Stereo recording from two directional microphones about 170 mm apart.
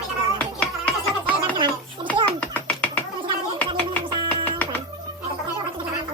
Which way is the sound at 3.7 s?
30° right (ahead or behind).